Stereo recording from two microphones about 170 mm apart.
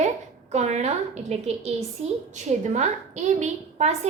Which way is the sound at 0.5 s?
40° right (ahead or behind).